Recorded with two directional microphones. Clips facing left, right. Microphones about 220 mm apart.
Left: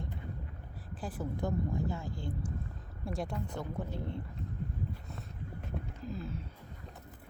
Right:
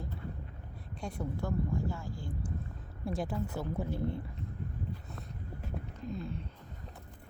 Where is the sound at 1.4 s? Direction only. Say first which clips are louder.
Left 1 dB; 20° left (ahead or behind).